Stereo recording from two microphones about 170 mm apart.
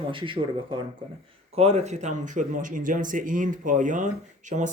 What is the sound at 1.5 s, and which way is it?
Speech, 40° right (ahead or behind).